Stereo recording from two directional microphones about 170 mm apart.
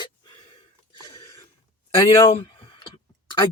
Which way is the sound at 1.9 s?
30° left (ahead or behind).